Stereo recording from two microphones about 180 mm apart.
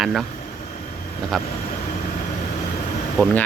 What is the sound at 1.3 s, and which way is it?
Speech, centre (ahead or behind).